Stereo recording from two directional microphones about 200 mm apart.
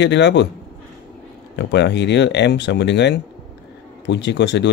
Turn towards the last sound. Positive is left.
turn(degrees=60)  # may be behind; listen again after turning